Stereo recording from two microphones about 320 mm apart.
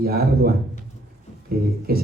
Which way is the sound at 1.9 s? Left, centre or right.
Right.